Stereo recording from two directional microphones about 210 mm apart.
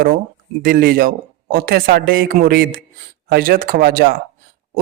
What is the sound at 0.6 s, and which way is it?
A man's voice, 40° right (ahead or behind).